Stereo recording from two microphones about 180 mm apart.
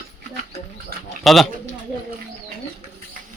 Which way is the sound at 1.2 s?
Centre (ahead or behind).